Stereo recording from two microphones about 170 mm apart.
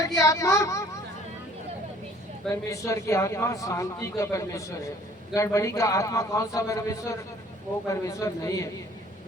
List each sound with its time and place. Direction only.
0.2 s speech: 20° left (ahead or behind)
2.6 s a man's voice: 20° left (ahead or behind)